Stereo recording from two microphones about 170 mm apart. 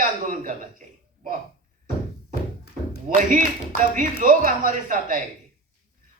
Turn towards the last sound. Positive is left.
turn(degrees=-55)  # may be behind; listen again after turning